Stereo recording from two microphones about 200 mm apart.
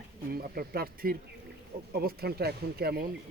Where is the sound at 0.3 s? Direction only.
50° right (ahead or behind).